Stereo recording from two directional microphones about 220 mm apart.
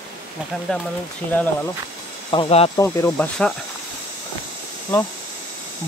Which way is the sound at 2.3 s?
25° left (ahead or behind).